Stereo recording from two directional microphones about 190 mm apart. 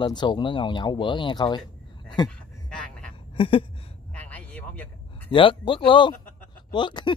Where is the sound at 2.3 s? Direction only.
5° left (ahead or behind).